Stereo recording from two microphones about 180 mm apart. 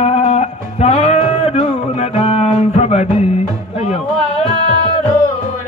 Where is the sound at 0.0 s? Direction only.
35° left (ahead or behind).